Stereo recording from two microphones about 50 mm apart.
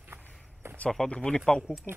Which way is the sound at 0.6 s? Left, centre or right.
Right.